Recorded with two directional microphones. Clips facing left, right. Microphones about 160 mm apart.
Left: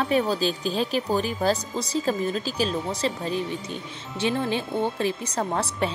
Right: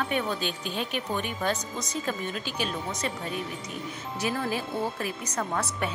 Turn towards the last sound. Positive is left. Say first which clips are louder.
# left 4 dB
turn(degrees=30)  # may be behind; listen again after turning